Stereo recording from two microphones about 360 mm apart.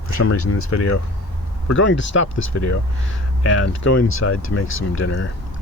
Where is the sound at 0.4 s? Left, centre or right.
Left.